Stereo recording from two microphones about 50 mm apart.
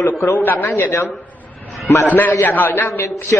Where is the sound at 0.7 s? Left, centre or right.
Left.